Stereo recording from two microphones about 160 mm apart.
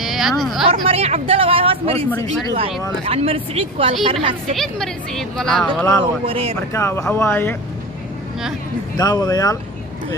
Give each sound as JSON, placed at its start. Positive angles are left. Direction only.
{"t": 0.0, "sound": "a woman's voice", "side_deg": 0}
{"t": 0.7, "sound": "speech", "side_deg": -35}
{"t": 3.1, "sound": "speech", "side_deg": -35}
{"t": 4.6, "sound": "speech", "side_deg": 5}
{"t": 6.2, "sound": "speech", "side_deg": -35}
{"t": 6.7, "sound": "speech", "side_deg": 20}
{"t": 8.9, "sound": "speech", "side_deg": 25}